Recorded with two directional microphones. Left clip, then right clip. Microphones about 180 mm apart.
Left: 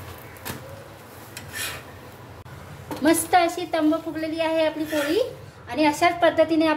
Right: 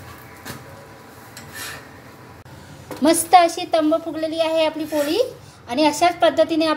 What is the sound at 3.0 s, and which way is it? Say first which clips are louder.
A woman's voice: right 5 dB; 25° right (ahead or behind).